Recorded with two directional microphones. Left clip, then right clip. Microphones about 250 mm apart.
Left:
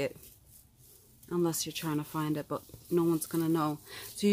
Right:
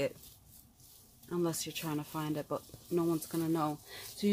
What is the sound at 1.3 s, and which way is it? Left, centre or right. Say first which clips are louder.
Speech: left 3 dB; centre.